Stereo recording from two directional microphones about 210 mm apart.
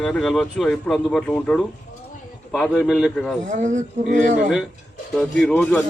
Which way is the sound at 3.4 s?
35° right (ahead or behind).